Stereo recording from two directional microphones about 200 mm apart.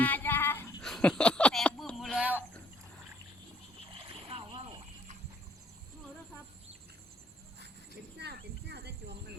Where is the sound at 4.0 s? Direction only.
25° right (ahead or behind).